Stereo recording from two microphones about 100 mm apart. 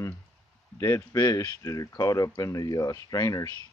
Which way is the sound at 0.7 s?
30° left (ahead or behind).